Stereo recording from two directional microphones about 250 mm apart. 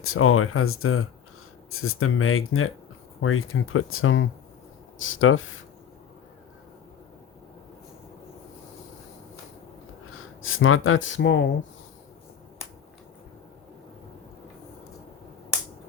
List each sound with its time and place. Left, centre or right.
0.0 s speech: left
10.4 s speech: left